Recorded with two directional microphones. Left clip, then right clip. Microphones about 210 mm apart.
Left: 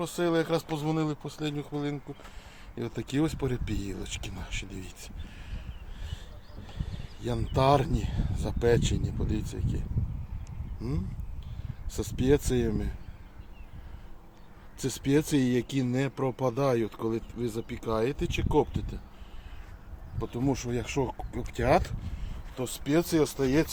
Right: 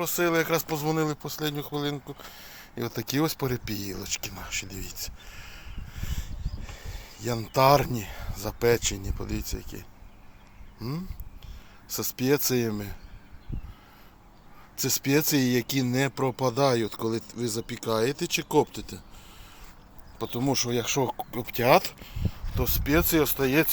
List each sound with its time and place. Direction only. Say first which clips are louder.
0.0 s speech: right 3 dB; 5° right (ahead or behind)
10.8 s a sound: right 1 dB; centre (ahead or behind)
11.9 s speech: even; centre (ahead or behind)
14.8 s speech: right 2 dB; 5° right (ahead or behind)
20.1 s speech: right 4 dB; 25° right (ahead or behind); by 23.6 s 5° right (ahead or behind)